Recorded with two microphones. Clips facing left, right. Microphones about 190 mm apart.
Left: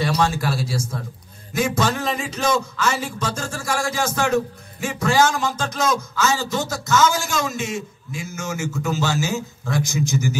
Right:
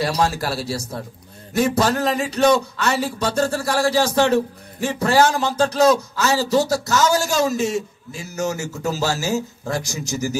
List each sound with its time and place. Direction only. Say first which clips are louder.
0.0 s a man's voice: even; 35° right (ahead or behind)